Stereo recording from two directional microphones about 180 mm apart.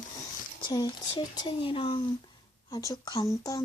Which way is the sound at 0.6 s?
20° left (ahead or behind).